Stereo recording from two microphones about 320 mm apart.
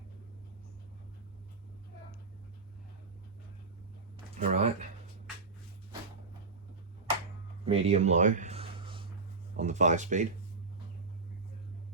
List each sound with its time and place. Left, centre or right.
4.4 s speech: right
7.6 s a sound: centre
9.6 s speech: right